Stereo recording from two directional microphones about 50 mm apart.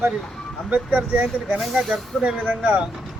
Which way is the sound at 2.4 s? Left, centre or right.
Right.